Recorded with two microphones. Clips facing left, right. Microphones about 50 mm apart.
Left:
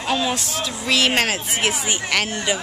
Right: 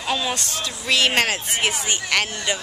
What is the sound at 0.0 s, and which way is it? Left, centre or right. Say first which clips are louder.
Speech: left 2 dB; centre.